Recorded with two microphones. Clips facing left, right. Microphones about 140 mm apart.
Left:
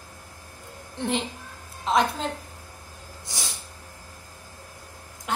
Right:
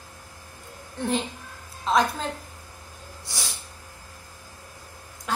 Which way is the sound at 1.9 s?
20° left (ahead or behind).